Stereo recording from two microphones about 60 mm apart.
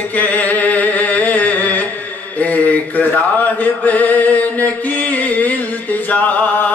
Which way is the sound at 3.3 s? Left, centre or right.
Left.